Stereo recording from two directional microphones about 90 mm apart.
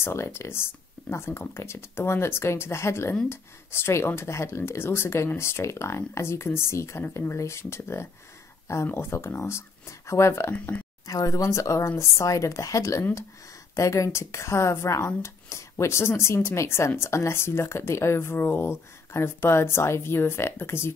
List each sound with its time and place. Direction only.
0.0 s speech: 30° left (ahead or behind)
10.5 s speech: 15° left (ahead or behind)
11.1 s speech: 40° left (ahead or behind)